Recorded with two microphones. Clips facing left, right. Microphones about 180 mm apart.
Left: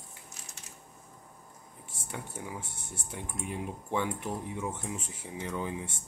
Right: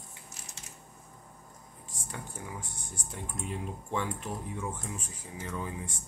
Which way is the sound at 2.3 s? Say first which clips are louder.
Left 2 dB; 20° left (ahead or behind).